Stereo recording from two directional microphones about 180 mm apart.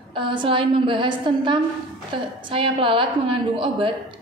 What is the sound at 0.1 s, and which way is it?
A woman's voice, 25° right (ahead or behind).